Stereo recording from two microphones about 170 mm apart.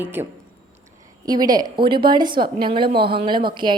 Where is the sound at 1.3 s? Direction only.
25° right (ahead or behind).